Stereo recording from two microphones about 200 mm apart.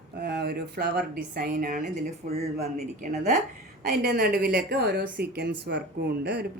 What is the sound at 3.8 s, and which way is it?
A woman's voice, 50° right (ahead or behind).